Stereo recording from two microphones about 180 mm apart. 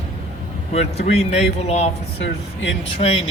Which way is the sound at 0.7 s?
35° left (ahead or behind).